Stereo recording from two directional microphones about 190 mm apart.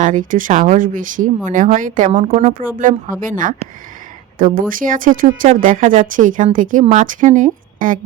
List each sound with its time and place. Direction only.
0.0 s speech: 45° right (ahead or behind)